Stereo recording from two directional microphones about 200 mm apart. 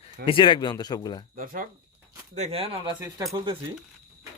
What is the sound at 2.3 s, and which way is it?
Speech, 30° right (ahead or behind).